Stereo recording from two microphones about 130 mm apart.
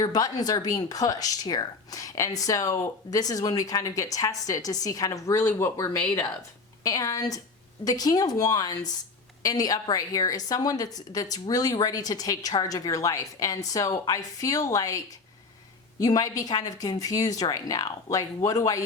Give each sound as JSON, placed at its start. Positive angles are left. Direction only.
{"t": 0.0, "sound": "a woman's voice", "side_deg": 30}